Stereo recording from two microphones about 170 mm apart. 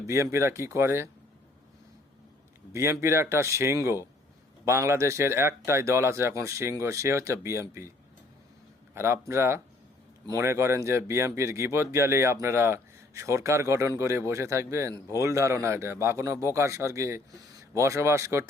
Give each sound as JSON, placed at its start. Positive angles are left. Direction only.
{"t": 0.1, "sound": "speech", "side_deg": -15}
{"t": 2.7, "sound": "speech", "side_deg": -15}
{"t": 9.0, "sound": "speech", "side_deg": -15}